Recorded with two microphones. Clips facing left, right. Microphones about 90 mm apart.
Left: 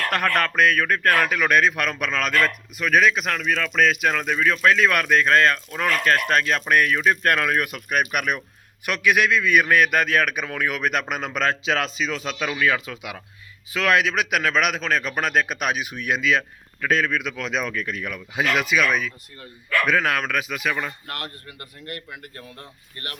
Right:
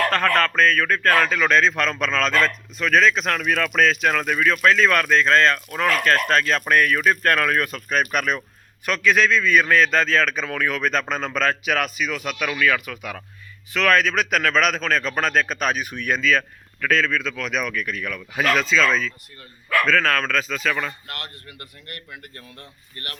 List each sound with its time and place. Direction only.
0.1 s a man's voice: 15° left (ahead or behind)
3.4 s a man's voice: 5° right (ahead or behind); by 6.8 s 10° left (ahead or behind)
6.8 s a man's voice: 20° left (ahead or behind)